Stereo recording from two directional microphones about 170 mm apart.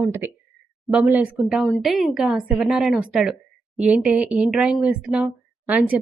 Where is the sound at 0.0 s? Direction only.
15° right (ahead or behind).